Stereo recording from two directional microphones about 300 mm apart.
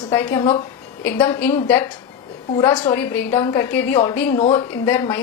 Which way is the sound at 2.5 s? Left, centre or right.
Centre.